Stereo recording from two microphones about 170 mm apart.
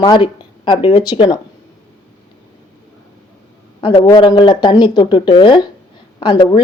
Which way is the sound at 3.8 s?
30° left (ahead or behind).